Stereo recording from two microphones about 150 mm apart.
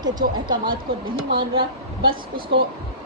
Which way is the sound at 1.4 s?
35° right (ahead or behind).